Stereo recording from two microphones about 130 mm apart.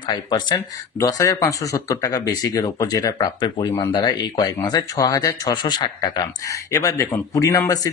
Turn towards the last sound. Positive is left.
turn(degrees=25)  # may be behind; listen again after turning